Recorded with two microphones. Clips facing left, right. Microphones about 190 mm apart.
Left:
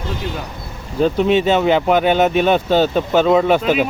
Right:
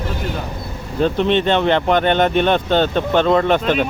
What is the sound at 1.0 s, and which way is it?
Speech, 5° left (ahead or behind).